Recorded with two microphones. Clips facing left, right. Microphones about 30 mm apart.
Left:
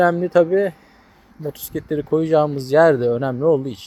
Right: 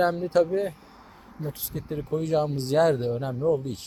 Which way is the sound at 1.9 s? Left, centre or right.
Left.